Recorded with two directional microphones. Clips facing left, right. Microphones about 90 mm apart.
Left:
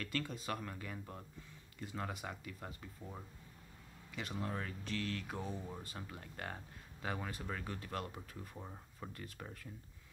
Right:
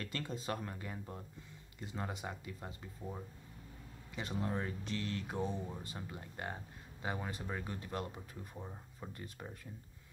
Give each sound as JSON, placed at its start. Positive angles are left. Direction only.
{"t": 0.0, "sound": "speech", "side_deg": -25}
{"t": 3.0, "sound": "speech", "side_deg": -10}
{"t": 4.1, "sound": "speech", "side_deg": -25}
{"t": 8.5, "sound": "speech", "side_deg": -5}
{"t": 9.1, "sound": "speech", "side_deg": -25}